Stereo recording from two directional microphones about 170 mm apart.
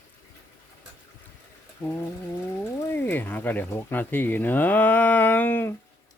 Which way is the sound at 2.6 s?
10° left (ahead or behind).